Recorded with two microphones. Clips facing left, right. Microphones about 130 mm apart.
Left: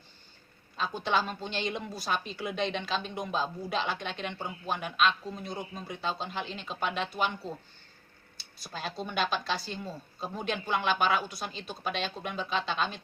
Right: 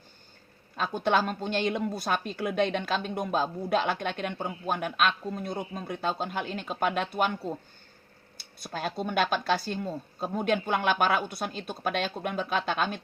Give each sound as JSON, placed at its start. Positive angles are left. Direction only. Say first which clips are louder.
{"t": 0.8, "sound": "speech", "louder": "right 4 dB", "side_deg": -55}
{"t": 8.4, "sound": "a sound", "louder": "right 5 dB", "side_deg": -55}
{"t": 9.0, "sound": "speech", "louder": "right 5 dB", "side_deg": -55}